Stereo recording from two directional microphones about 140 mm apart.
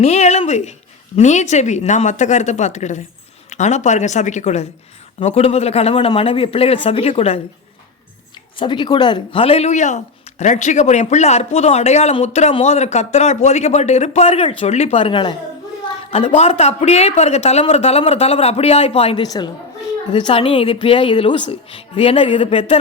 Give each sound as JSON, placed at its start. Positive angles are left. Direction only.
{"t": 0.0, "sound": "speech", "side_deg": 50}
{"t": 8.5, "sound": "speech", "side_deg": 35}
{"t": 19.2, "sound": "a woman's voice", "side_deg": 30}